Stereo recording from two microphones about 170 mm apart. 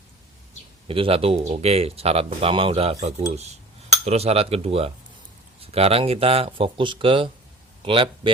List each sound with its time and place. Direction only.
0.9 s a man's voice: 35° right (ahead or behind)